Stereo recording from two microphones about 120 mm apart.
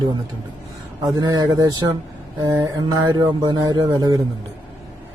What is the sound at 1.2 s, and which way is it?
Speech, 35° right (ahead or behind).